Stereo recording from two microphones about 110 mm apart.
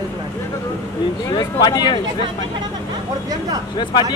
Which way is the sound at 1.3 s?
40° left (ahead or behind).